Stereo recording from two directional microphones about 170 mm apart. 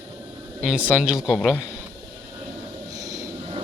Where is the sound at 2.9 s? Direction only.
20° right (ahead or behind).